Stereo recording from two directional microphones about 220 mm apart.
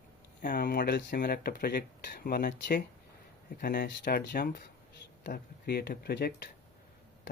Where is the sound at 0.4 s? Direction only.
40° left (ahead or behind).